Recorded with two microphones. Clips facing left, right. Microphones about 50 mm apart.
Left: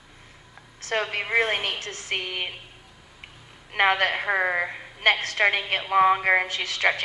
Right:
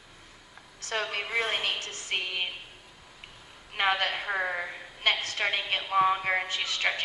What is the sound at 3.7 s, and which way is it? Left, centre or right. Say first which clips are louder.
A woman's voice: left 6 dB; left.